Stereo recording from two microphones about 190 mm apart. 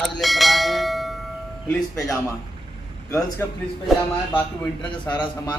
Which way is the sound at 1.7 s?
Centre (ahead or behind).